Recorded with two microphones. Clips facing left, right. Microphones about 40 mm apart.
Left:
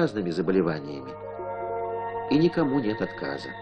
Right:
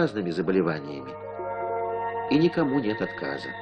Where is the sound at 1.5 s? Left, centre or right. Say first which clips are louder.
Right 2 dB; right.